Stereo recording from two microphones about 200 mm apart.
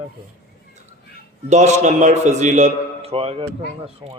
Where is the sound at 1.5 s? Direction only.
35° right (ahead or behind).